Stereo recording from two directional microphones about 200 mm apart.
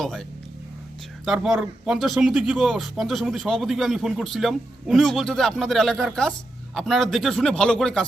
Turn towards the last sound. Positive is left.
turn(degrees=5)  # may be behind; listen again after turning